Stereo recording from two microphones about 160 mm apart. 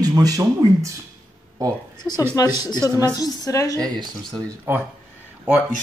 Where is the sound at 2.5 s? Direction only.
25° left (ahead or behind).